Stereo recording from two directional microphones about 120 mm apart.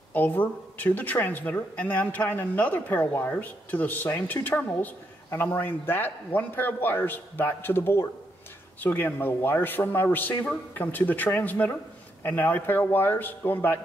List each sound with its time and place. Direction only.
0.1 s speech: 15° left (ahead or behind)